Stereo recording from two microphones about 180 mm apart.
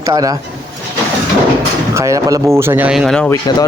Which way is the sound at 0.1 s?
20° right (ahead or behind).